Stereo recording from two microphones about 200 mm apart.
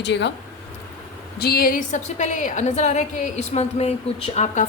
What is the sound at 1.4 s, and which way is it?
A woman's voice, 50° left (ahead or behind).